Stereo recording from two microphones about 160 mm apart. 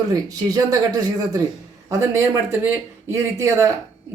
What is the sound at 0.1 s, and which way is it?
A man's voice, 25° right (ahead or behind).